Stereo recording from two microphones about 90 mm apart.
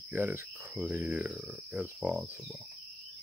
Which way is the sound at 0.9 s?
20° right (ahead or behind).